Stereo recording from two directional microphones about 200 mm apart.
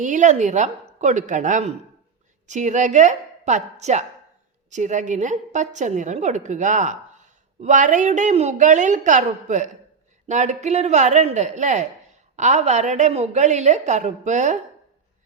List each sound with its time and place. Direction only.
0.0 s a woman's voice: 40° right (ahead or behind)